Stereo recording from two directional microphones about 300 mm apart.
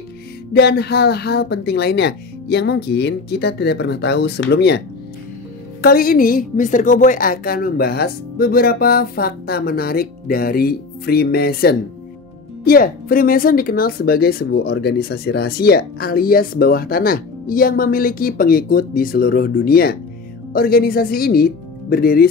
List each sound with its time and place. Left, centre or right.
0.5 s speech: left